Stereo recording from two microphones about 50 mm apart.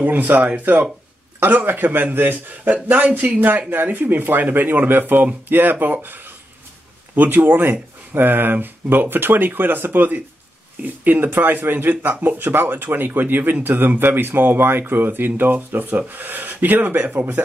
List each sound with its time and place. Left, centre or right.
0.0 s speech: right